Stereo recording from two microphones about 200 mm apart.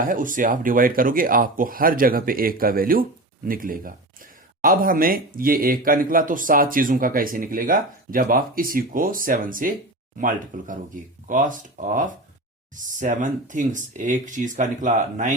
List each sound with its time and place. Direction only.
0.0 s speech: 45° right (ahead or behind)